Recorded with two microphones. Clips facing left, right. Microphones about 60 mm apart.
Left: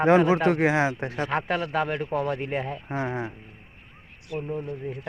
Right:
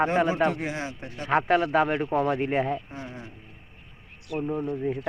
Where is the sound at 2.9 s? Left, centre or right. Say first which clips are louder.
Left 10 dB; left.